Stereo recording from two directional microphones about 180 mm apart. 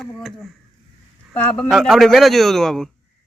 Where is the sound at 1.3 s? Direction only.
5° left (ahead or behind).